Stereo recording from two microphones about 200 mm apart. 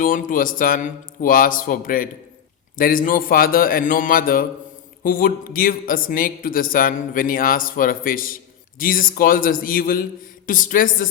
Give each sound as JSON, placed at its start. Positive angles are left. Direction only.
{"t": 0.0, "sound": "a man's voice", "side_deg": 45}